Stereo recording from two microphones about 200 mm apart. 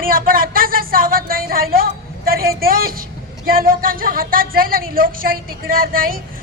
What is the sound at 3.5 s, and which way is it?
Speech, 45° right (ahead or behind).